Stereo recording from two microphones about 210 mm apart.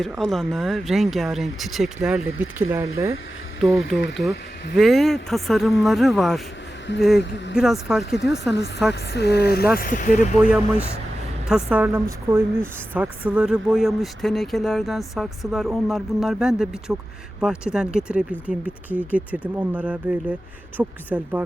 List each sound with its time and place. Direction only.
0.0 s a woman's voice: centre (ahead or behind)
3.6 s a woman's voice: centre (ahead or behind)
7.2 s speech: 60° left (ahead or behind)
7.5 s a woman's voice: centre (ahead or behind)
8.9 s speech: 50° left (ahead or behind)
10.3 s a woman's voice: 5° right (ahead or behind)